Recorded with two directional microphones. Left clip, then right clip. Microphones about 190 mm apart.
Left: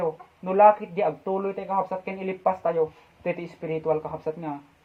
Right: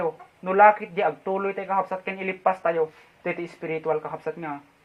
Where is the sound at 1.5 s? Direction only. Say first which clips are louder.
Right 1 dB; 25° right (ahead or behind).